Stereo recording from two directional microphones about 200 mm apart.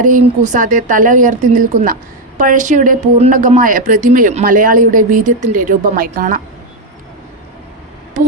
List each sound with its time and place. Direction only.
0.0 s a woman's voice: 40° right (ahead or behind)